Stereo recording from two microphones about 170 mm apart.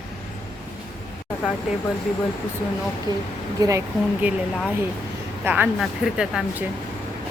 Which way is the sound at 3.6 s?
15° right (ahead or behind).